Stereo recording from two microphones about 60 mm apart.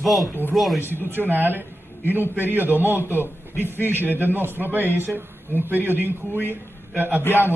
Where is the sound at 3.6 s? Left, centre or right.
Left.